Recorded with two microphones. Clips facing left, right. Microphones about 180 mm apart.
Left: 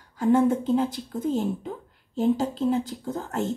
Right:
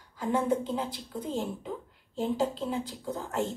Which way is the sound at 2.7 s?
45° left (ahead or behind).